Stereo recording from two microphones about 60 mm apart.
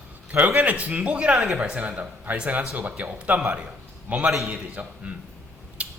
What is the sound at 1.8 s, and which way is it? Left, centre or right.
Speech, right.